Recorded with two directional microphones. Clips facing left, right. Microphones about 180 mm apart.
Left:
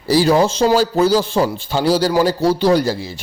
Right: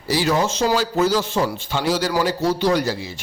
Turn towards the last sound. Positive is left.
turn(degrees=35)  # may be behind; listen again after turning